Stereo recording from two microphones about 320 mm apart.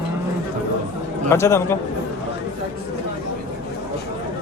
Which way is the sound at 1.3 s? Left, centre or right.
Centre.